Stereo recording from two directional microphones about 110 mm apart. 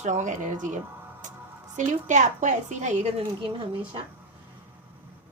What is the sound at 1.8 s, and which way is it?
A woman's voice, 90° right.